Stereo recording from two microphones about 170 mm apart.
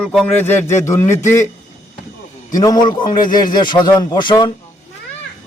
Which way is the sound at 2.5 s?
20° left (ahead or behind).